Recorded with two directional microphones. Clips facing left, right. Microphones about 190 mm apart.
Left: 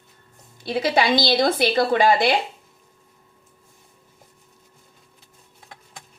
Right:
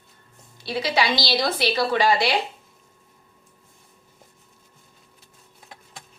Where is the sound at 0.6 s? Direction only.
50° left (ahead or behind).